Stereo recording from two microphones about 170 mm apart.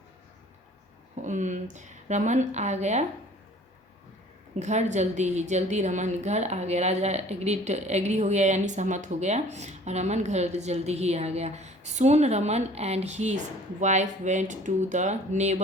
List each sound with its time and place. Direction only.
1.2 s a woman's voice: 45° right (ahead or behind)
4.6 s a woman's voice: 45° right (ahead or behind)